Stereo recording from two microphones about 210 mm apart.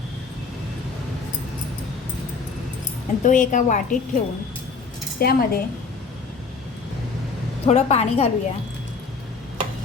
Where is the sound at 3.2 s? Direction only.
35° left (ahead or behind).